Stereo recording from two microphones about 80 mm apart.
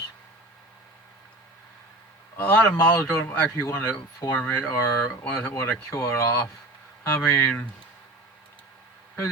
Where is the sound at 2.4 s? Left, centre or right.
Left.